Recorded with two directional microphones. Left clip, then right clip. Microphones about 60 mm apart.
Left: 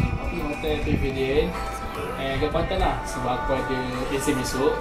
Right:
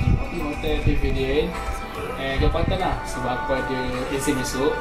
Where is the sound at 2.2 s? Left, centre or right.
Centre.